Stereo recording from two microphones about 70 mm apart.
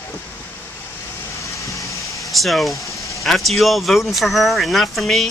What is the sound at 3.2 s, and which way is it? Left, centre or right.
Speech, centre.